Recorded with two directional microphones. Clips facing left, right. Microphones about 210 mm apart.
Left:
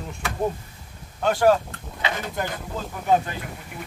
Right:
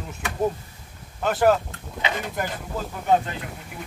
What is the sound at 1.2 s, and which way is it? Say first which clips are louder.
Speech: left 1 dB; 5° right (ahead or behind).